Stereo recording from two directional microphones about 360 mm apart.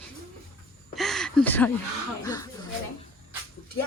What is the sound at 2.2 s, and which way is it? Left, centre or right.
Speech, centre.